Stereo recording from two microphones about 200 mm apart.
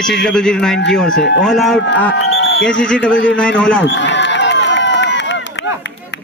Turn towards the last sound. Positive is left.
turn(degrees=60)  # may be behind; listen again after turning